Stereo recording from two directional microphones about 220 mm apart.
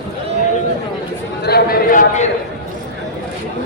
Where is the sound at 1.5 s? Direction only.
45° left (ahead or behind).